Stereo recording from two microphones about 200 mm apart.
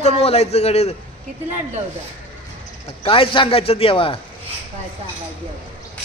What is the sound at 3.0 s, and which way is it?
A man's voice, 25° left (ahead or behind).